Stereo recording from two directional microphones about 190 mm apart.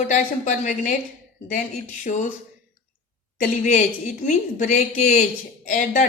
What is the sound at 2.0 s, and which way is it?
Speech, 40° left (ahead or behind).